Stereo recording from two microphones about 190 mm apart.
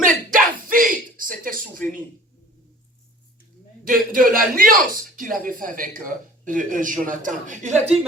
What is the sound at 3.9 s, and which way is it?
A man's voice, 45° right (ahead or behind).